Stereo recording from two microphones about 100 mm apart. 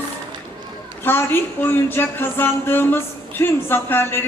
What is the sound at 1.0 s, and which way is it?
Speech, 20° left (ahead or behind).